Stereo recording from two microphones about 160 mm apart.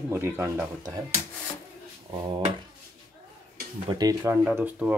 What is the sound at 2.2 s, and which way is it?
Speech, 30° right (ahead or behind).